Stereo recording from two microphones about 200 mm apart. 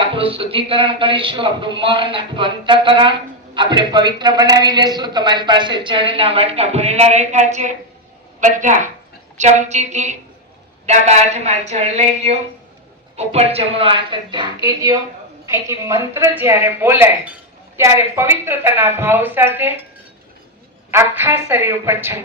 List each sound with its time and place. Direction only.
0.0 s a woman's voice: 25° right (ahead or behind); by 19.8 s 10° right (ahead or behind)
20.9 s a woman's voice: 10° right (ahead or behind)